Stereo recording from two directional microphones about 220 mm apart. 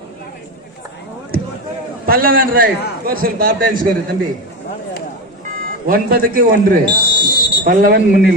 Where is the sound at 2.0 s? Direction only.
40° right (ahead or behind).